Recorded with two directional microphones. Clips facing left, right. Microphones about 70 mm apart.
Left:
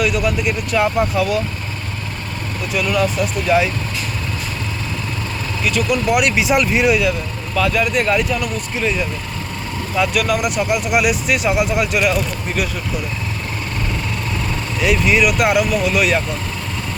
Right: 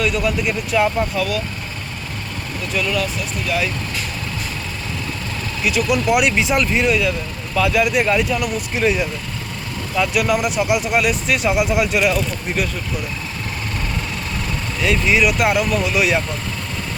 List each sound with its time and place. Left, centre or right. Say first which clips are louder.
0.0 s speech: left 1 dB; centre
0.9 s speech: left 3 dB; centre
2.7 s speech: left 3 dB; centre
3.5 s speech: left 6 dB; left
5.6 s speech: even; centre
7.5 s speech: right 1 dB; centre
9.9 s speech: even; centre
14.8 s speech: left 1 dB; centre